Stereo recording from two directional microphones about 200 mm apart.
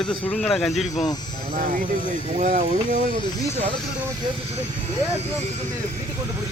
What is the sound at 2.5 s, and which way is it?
Speech, 30° right (ahead or behind).